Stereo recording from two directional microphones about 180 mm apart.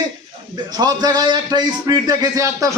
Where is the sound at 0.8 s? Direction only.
20° right (ahead or behind).